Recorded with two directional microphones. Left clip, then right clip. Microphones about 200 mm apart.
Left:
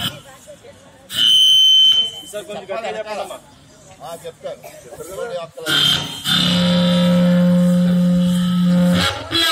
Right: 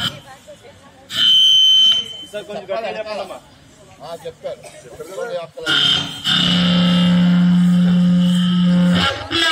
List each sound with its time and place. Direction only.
1.0 s fire alarm: 15° left (ahead or behind)
2.3 s speech: 40° right (ahead or behind)
5.7 s music: 45° left (ahead or behind)